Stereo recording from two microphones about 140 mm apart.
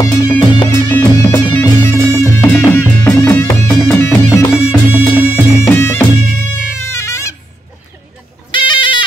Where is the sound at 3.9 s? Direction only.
20° left (ahead or behind).